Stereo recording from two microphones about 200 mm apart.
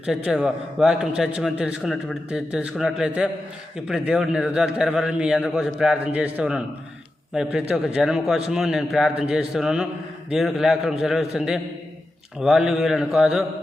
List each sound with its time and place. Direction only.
0.0 s a man's voice: 5° right (ahead or behind)